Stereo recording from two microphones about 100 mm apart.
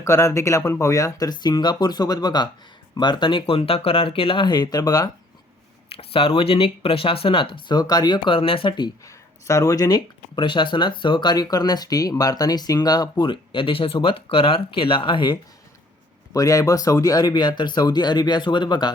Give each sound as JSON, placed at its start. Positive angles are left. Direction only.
{"t": 0.0, "sound": "speech", "side_deg": 30}
{"t": 1.3, "sound": "speech", "side_deg": 45}
{"t": 5.9, "sound": "speech", "side_deg": 65}
{"t": 9.0, "sound": "speech", "side_deg": 30}
{"t": 10.3, "sound": "speech", "side_deg": 55}
{"t": 13.2, "sound": "speech", "side_deg": 60}
{"t": 16.3, "sound": "speech", "side_deg": 35}